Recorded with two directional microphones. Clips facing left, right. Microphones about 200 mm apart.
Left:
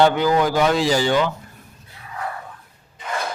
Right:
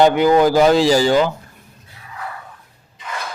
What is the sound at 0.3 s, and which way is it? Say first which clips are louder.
Speech: right 6 dB; 30° right (ahead or behind).